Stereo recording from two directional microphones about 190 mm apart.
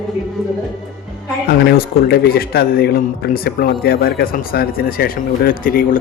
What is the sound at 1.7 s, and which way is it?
A man's voice, 55° left (ahead or behind).